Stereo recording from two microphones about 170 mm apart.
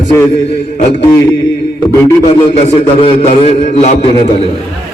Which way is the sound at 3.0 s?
40° left (ahead or behind).